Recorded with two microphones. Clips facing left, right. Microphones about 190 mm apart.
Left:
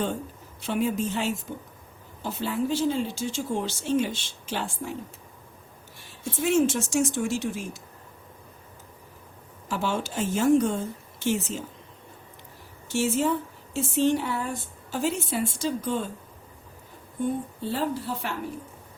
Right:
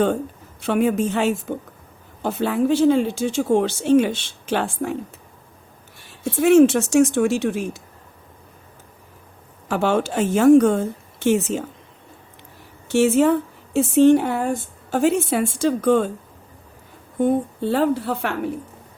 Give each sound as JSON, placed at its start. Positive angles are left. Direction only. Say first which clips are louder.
{"t": 0.6, "sound": "speech", "louder": "right 7 dB", "side_deg": -65}
{"t": 6.4, "sound": "speech", "louder": "right 10 dB", "side_deg": -70}
{"t": 9.6, "sound": "speech", "louder": "right 9 dB", "side_deg": -65}
{"t": 12.9, "sound": "speech", "louder": "right 9 dB", "side_deg": -65}
{"t": 17.2, "sound": "speech", "louder": "right 9 dB", "side_deg": -65}